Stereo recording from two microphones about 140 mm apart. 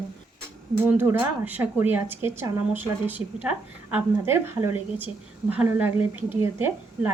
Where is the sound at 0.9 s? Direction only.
15° right (ahead or behind).